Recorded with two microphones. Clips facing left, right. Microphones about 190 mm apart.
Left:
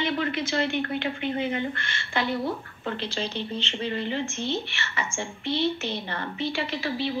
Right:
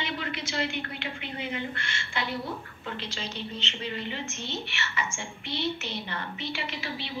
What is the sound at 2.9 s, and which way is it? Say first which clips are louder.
A woman's voice: left 6 dB; 35° left (ahead or behind).